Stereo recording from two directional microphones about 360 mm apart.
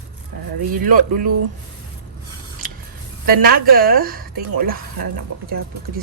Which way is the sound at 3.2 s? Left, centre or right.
Right.